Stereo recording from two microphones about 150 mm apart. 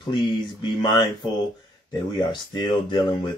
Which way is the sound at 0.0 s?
35° left (ahead or behind).